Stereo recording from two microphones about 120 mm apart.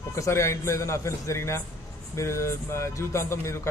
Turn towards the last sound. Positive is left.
turn(degrees=20)  # may be behind; listen again after turning